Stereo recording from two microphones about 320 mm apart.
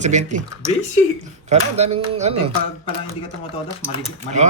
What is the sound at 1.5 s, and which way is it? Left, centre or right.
Speech, right.